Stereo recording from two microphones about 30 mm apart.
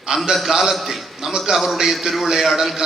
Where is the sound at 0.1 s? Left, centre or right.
Right.